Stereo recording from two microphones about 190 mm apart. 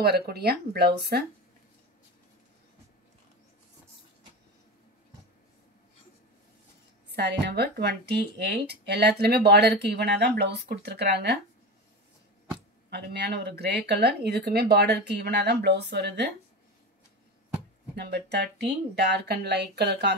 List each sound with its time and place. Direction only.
0.0 s speech: 55° right (ahead or behind)
7.1 s speech: 60° right (ahead or behind)
12.9 s speech: 60° right (ahead or behind)
17.9 s speech: 60° right (ahead or behind)